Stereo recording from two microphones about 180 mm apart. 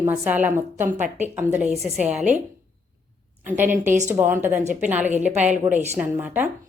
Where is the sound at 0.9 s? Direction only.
45° right (ahead or behind).